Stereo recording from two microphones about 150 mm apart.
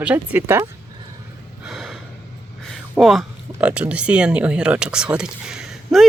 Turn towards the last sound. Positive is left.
turn(degrees=-5)  # may be behind; listen again after turning